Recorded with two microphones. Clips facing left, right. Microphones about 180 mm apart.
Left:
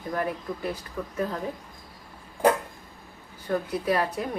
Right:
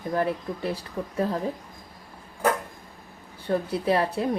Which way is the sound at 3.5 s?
30° right (ahead or behind).